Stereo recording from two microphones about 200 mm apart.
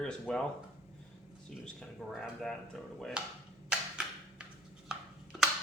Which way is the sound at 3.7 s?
5° right (ahead or behind).